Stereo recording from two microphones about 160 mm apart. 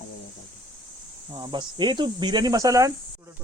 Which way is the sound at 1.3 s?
30° right (ahead or behind).